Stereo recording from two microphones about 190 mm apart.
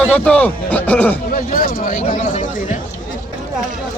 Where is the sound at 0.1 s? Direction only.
10° left (ahead or behind).